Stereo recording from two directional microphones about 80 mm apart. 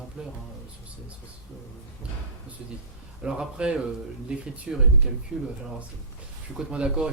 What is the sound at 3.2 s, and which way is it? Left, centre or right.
Speech, centre.